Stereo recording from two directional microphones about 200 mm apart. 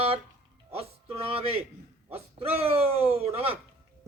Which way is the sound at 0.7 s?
30° right (ahead or behind).